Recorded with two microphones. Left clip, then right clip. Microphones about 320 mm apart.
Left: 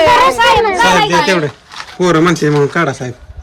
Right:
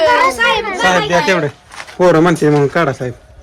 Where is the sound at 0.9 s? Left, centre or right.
Centre.